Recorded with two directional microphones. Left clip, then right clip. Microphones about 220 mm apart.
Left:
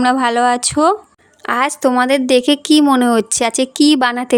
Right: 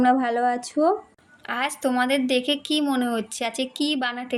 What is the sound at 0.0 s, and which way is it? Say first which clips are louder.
Speech: left 7 dB; 55° left (ahead or behind).